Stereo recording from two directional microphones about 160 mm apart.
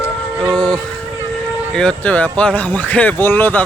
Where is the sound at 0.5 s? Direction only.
5° left (ahead or behind).